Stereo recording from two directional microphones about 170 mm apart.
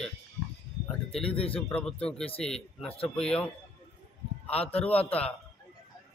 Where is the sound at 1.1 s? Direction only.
35° left (ahead or behind).